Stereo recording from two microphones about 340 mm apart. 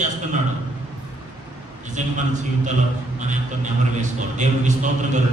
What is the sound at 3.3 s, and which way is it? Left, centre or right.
A man's voice, right.